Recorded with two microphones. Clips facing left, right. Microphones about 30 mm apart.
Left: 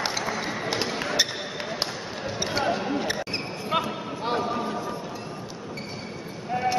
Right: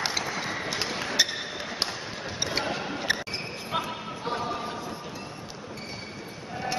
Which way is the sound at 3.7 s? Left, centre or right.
Left.